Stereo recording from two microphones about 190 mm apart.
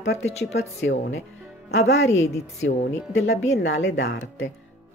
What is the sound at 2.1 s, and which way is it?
Speech, 35° left (ahead or behind).